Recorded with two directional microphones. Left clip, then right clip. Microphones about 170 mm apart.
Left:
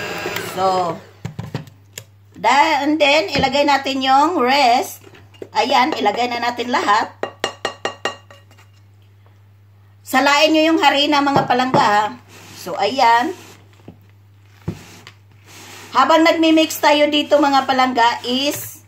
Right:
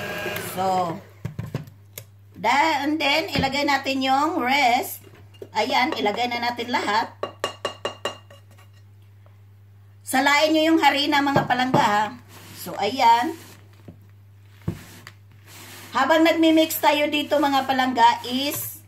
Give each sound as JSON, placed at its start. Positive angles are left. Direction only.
{"t": 0.0, "sound": "printer", "side_deg": 15}
{"t": 2.0, "sound": "speech", "side_deg": 20}
{"t": 10.0, "sound": "a woman's voice", "side_deg": 15}
{"t": 12.6, "sound": "speech", "side_deg": 25}
{"t": 13.9, "sound": "a sound", "side_deg": 10}
{"t": 15.9, "sound": "speech", "side_deg": 25}